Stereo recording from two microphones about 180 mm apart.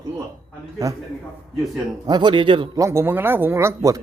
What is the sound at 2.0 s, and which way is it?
Speech, 25° right (ahead or behind).